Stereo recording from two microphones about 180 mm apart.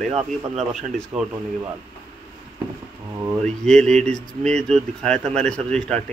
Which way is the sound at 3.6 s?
5° left (ahead or behind).